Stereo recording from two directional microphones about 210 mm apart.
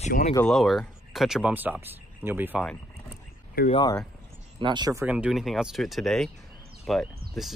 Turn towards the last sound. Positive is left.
turn(degrees=0)  # may be behind; listen again after turning